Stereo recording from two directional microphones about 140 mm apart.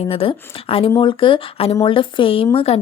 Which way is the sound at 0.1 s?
45° left (ahead or behind).